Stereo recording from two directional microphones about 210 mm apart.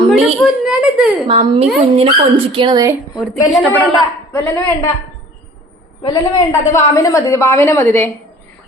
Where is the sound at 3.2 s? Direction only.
Centre (ahead or behind).